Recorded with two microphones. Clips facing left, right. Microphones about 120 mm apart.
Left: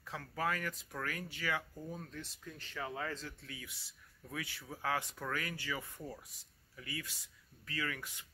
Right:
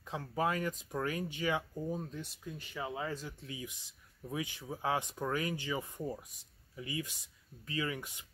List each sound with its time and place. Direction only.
0.1 s speech: 20° right (ahead or behind)